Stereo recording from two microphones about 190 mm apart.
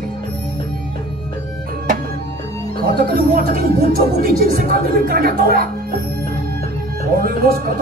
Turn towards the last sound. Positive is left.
turn(degrees=-50)  # may be behind; listen again after turning